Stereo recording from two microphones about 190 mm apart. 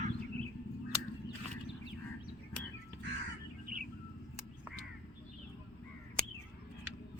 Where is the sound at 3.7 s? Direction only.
45° right (ahead or behind).